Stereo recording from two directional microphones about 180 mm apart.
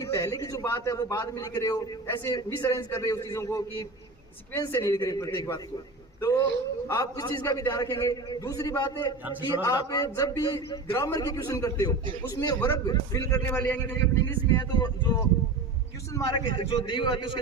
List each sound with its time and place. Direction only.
0.0 s a man's voice: 20° left (ahead or behind)
16.3 s a man's voice: 30° left (ahead or behind)